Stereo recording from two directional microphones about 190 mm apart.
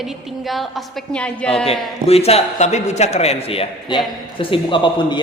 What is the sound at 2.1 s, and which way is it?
A man's voice, 30° left (ahead or behind).